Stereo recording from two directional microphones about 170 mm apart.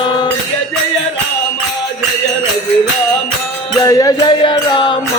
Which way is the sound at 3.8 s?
20° left (ahead or behind).